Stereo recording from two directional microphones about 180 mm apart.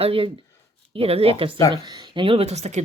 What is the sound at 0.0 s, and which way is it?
Speech, 30° right (ahead or behind).